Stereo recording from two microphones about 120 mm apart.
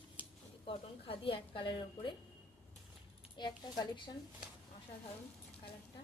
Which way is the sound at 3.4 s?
40° left (ahead or behind).